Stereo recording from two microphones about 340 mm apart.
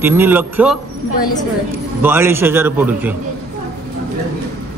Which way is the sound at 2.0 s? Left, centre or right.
Centre.